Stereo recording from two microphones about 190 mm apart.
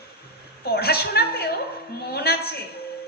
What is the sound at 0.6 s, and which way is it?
A woman's voice, 55° left (ahead or behind).